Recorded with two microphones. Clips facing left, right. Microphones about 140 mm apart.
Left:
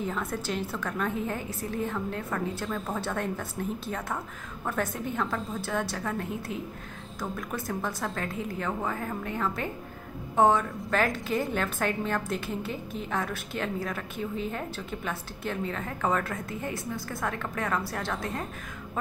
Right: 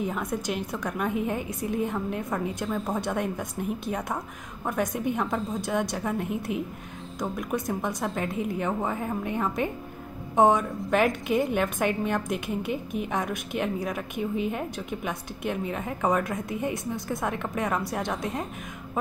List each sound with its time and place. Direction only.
0.0 s a woman's voice: 15° right (ahead or behind)